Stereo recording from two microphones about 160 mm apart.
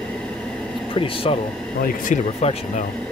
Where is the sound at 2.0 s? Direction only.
45° left (ahead or behind).